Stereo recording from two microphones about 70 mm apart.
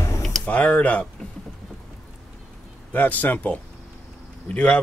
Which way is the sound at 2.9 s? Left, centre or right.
Left.